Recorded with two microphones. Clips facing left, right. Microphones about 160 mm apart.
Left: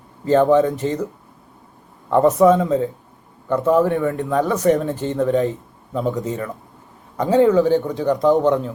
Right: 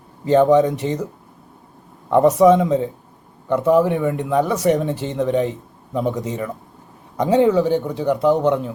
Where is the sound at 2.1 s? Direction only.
15° right (ahead or behind).